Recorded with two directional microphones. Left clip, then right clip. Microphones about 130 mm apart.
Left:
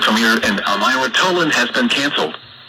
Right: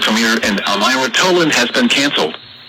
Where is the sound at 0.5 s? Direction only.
40° right (ahead or behind).